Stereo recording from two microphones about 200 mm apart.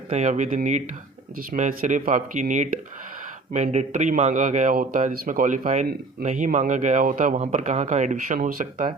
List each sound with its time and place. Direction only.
0.1 s a man's voice: 35° right (ahead or behind)